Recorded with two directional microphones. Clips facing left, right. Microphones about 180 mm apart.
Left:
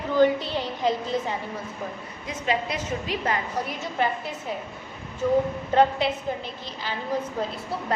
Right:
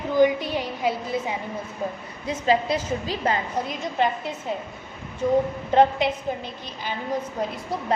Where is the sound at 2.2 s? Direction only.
30° right (ahead or behind).